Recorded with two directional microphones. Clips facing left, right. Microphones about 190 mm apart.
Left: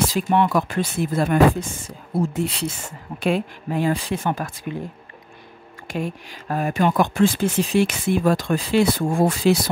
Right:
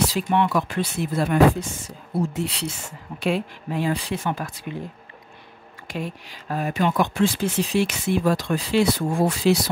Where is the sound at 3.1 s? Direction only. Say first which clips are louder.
Left 2 dB; 50° left (ahead or behind).